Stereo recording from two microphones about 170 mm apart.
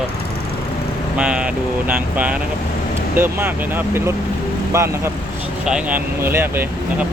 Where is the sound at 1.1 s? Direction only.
5° right (ahead or behind).